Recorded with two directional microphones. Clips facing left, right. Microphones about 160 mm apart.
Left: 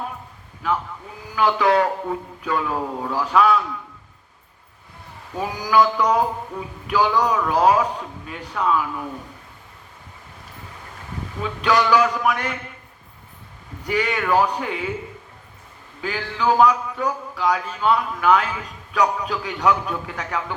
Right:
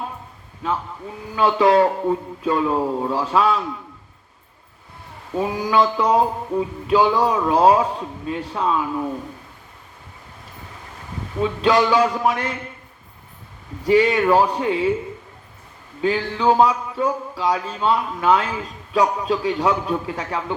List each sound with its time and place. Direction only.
1.4 s speech: 30° right (ahead or behind)
5.4 s speech: 25° right (ahead or behind)
11.4 s speech: 30° right (ahead or behind)
13.8 s speech: 30° right (ahead or behind)
16.0 s speech: 30° right (ahead or behind)